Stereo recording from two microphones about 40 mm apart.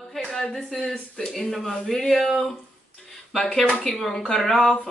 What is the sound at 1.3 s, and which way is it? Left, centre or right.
Speech, centre.